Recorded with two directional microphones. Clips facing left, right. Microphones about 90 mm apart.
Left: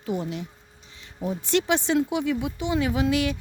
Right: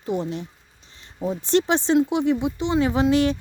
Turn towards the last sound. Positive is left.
turn(degrees=-30)  # may be behind; listen again after turning